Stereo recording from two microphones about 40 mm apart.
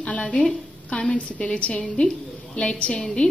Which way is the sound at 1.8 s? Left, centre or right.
Centre.